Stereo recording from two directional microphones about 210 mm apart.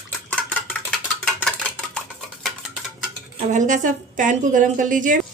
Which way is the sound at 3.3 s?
35° right (ahead or behind).